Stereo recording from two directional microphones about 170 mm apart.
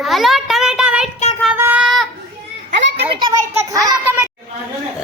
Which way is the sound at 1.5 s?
10° right (ahead or behind).